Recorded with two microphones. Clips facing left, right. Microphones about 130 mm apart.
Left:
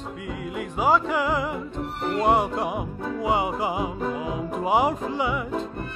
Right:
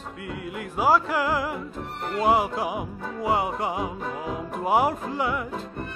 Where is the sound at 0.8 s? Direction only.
5° right (ahead or behind).